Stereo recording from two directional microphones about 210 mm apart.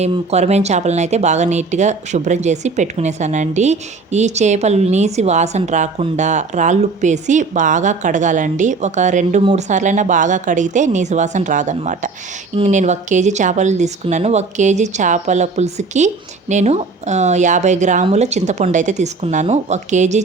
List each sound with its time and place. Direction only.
0.0 s speech: 30° right (ahead or behind)